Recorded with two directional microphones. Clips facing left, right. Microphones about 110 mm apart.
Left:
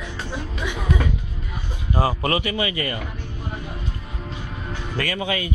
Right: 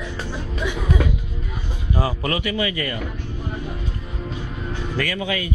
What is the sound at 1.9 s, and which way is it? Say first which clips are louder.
Speech: left 2 dB; 45° left (ahead or behind).